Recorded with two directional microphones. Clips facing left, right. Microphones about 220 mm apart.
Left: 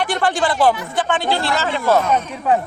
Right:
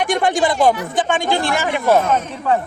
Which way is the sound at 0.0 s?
15° right (ahead or behind).